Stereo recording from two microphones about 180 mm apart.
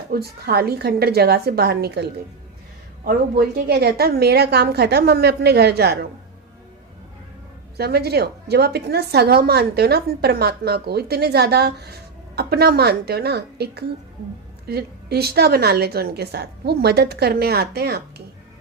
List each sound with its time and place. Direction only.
0.1 s a woman's voice: 60° right (ahead or behind)
7.8 s a woman's voice: 60° right (ahead or behind)